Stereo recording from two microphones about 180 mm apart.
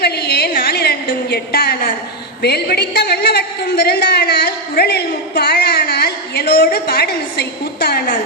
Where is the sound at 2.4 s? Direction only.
65° left (ahead or behind).